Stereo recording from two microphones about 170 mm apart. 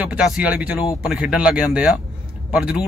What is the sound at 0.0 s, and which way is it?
A man's voice, 5° right (ahead or behind).